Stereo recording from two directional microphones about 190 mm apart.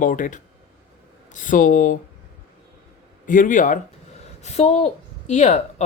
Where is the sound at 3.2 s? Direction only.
45° left (ahead or behind).